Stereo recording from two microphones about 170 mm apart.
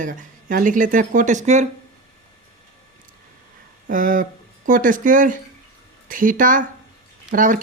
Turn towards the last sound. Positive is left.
turn(degrees=-50)  # may be behind; listen again after turning